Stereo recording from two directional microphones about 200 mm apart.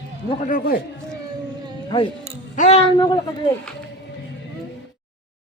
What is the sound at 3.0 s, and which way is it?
Speech, 20° left (ahead or behind).